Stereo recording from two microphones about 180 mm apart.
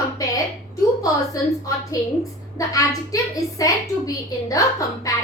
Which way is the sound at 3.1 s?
20° left (ahead or behind).